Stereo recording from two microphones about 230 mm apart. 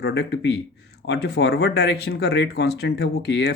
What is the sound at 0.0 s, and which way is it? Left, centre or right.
Speech, left.